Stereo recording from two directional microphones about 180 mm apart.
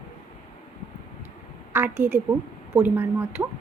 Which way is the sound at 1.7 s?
10° right (ahead or behind).